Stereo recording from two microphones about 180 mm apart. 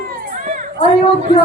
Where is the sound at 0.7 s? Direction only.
30° left (ahead or behind).